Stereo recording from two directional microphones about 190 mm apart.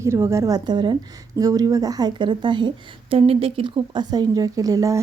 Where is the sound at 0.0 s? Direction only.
15° right (ahead or behind).